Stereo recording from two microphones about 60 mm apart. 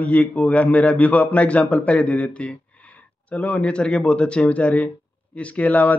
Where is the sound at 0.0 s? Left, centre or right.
Left.